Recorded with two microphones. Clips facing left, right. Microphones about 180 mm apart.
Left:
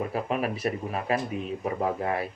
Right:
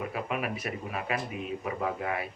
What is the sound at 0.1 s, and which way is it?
Speech, 35° left (ahead or behind).